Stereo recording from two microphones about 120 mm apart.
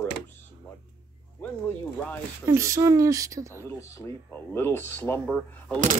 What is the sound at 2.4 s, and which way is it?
Speech, 25° right (ahead or behind).